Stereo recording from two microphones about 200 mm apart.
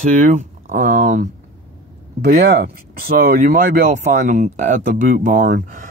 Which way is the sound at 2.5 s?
50° right (ahead or behind).